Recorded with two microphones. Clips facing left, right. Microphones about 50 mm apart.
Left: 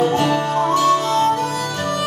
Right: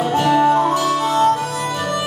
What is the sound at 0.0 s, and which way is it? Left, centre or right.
Music, centre.